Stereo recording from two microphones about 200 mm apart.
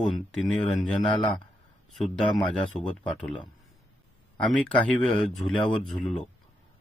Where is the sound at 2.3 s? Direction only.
25° left (ahead or behind).